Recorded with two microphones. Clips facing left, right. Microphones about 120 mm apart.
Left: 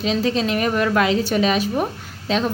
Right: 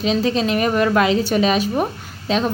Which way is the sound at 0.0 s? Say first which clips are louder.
Right 2 dB; 20° right (ahead or behind).